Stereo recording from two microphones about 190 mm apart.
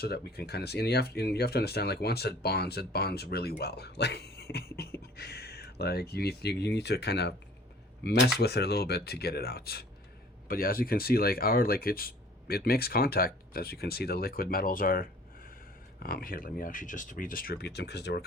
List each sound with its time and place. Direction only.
0.0 s speech: 55° left (ahead or behind)
8.4 s speech: 60° left (ahead or behind)